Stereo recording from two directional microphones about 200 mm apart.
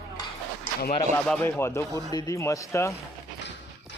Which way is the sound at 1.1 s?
10° left (ahead or behind).